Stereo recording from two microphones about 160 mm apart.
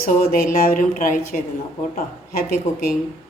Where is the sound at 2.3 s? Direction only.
70° left (ahead or behind).